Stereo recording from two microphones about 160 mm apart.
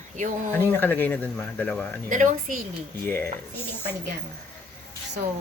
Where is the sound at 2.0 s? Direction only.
55° right (ahead or behind).